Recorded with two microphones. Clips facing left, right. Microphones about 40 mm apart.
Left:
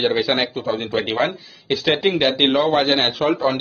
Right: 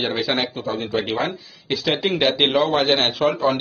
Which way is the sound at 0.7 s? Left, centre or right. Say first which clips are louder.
Left 2 dB; left.